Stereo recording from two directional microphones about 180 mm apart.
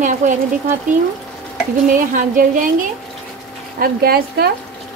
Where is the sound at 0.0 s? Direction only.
45° right (ahead or behind).